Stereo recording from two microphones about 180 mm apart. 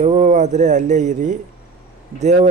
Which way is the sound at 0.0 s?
40° right (ahead or behind).